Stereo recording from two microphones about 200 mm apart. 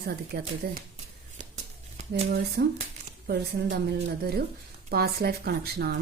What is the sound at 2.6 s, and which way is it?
Speech, 55° right (ahead or behind).